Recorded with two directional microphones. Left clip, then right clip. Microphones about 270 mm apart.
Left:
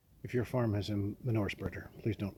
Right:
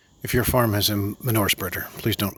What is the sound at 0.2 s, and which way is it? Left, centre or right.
Speech, right.